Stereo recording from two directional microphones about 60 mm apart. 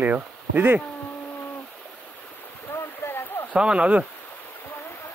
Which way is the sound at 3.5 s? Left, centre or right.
Centre.